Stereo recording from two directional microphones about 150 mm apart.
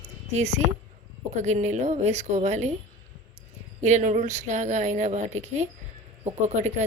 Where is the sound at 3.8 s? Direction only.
55° right (ahead or behind).